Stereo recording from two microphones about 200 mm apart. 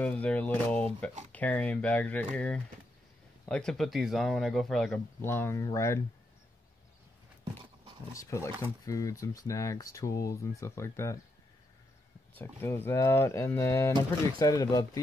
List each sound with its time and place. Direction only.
0.0 s speech: 5° left (ahead or behind)
8.3 s speech: 15° left (ahead or behind)
12.4 s speech: 10° left (ahead or behind)